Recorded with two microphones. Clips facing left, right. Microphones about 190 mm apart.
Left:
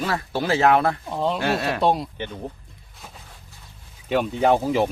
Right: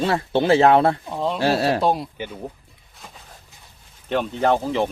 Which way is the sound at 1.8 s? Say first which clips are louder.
Even; centre (ahead or behind).